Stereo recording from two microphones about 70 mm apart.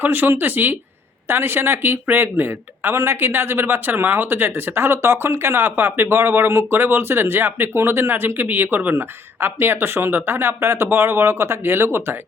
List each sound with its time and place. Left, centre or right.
0.0 s a man's voice: right